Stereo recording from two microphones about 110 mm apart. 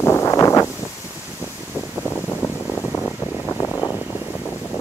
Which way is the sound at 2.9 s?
5° left (ahead or behind).